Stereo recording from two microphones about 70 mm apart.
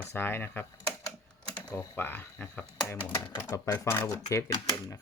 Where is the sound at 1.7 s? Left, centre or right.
Left.